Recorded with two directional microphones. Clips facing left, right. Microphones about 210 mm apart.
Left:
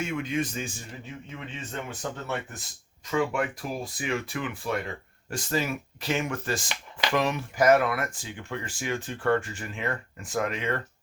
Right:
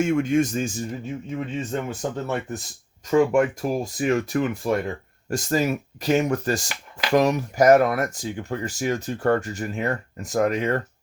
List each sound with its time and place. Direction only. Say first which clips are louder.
0.0 s speech: right 9 dB; 45° right (ahead or behind)